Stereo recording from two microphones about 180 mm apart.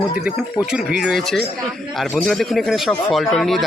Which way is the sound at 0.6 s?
5° right (ahead or behind).